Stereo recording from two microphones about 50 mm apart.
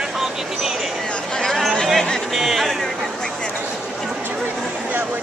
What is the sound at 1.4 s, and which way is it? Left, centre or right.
Chatter, centre.